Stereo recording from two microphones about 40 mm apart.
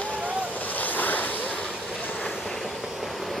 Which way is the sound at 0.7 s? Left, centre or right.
Left.